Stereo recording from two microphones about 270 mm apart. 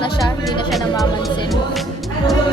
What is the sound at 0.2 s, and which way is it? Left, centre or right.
Music, centre.